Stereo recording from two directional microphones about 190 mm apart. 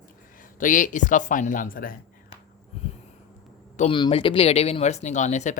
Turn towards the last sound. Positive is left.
turn(degrees=40)  # may be behind; listen again after turning